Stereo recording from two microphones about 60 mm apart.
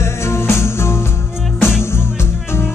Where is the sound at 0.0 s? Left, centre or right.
Left.